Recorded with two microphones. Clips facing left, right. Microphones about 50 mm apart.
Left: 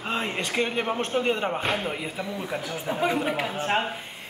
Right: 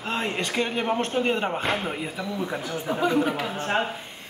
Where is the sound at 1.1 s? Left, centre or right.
Centre.